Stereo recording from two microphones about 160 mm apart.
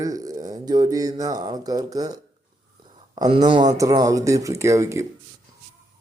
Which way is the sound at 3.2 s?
35° right (ahead or behind).